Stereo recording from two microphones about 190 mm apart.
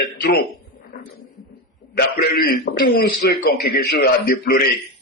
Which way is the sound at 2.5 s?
55° left (ahead or behind).